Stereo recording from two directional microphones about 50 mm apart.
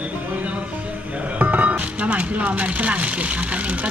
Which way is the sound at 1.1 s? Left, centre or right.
Right.